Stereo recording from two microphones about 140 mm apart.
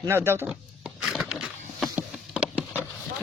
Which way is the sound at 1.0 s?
5° right (ahead or behind).